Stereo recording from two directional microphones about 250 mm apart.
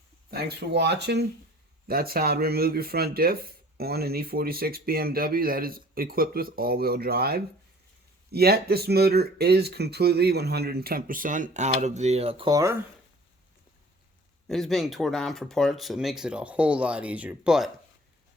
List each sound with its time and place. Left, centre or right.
0.3 s speech: right; by 12.7 s centre
14.4 s speech: centre